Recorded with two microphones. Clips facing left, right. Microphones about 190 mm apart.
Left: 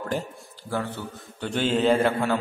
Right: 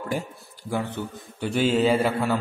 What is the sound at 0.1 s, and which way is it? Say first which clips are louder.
A man's voice: right 2 dB; 10° right (ahead or behind).